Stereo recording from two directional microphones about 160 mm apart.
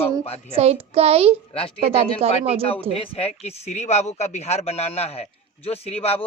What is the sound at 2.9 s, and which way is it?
Speech, 40° left (ahead or behind).